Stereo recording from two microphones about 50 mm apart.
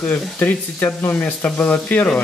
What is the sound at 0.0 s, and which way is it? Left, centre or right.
Speech, left.